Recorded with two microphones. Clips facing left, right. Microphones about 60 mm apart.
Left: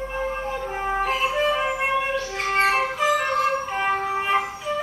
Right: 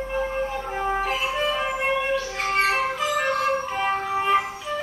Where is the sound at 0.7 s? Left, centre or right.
Centre.